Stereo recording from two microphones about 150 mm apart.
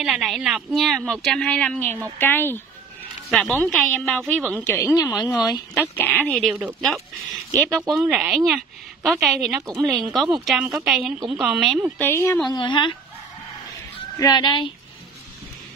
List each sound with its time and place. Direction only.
0.0 s a woman's voice: 5° right (ahead or behind); by 2.6 s 15° left (ahead or behind)
3.3 s a woman's voice: centre (ahead or behind)
4.6 s a woman's voice: 15° left (ahead or behind)
5.8 s a woman's voice: 15° left (ahead or behind)
7.5 s speech: 20° right (ahead or behind)
7.9 s a woman's voice: 5° right (ahead or behind)
9.6 s speech: 20° right (ahead or behind)
10.1 s a woman's voice: centre (ahead or behind)
12.0 s speech: 15° left (ahead or behind)
12.4 s a woman's voice: 30° left (ahead or behind)
14.1 s a woman's voice: 25° left (ahead or behind)